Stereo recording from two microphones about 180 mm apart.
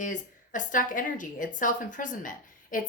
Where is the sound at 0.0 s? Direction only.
45° left (ahead or behind).